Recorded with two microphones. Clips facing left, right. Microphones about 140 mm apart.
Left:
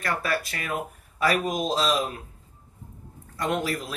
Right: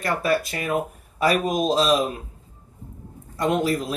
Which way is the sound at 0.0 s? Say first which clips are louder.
Right 5 dB; 20° right (ahead or behind).